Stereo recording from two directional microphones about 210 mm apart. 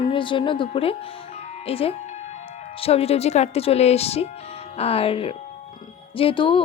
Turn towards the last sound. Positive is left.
turn(degrees=25)  # may be behind; listen again after turning